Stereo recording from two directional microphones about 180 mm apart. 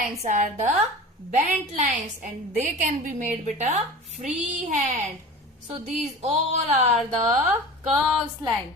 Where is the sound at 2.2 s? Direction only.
45° right (ahead or behind).